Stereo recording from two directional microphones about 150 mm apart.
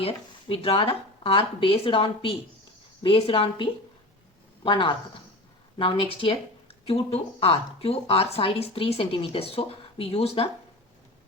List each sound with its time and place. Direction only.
0.0 s speech: 40° left (ahead or behind)